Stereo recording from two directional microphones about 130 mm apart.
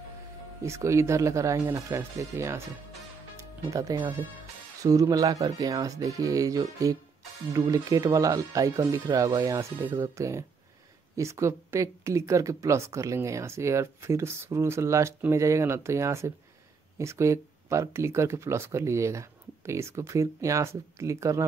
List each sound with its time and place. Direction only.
0.6 s speech: 20° right (ahead or behind)
3.7 s speech: 25° right (ahead or behind)